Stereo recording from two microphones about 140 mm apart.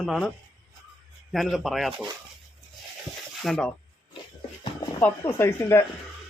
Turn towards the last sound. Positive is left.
turn(degrees=20)  # may be behind; listen again after turning